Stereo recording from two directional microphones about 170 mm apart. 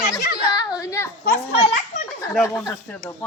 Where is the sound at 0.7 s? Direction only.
20° left (ahead or behind).